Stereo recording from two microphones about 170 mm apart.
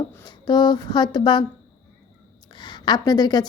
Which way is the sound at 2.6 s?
25° left (ahead or behind).